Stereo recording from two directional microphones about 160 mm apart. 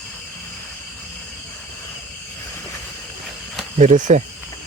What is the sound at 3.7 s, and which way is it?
Speech, 50° right (ahead or behind).